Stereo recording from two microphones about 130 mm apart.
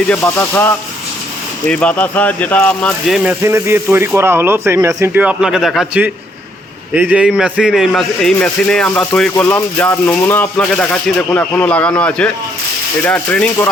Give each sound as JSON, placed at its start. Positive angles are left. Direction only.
{"t": 0.3, "sound": "speech", "side_deg": 20}
{"t": 3.1, "sound": "speech", "side_deg": -5}
{"t": 3.4, "sound": "speech", "side_deg": -20}
{"t": 5.1, "sound": "a man's voice", "side_deg": -10}
{"t": 6.9, "sound": "a man's voice", "side_deg": -10}